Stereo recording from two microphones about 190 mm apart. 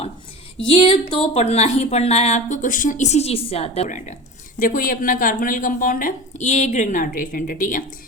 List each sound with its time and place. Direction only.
0.6 s a woman's voice: 25° left (ahead or behind); by 7.9 s 45° left (ahead or behind)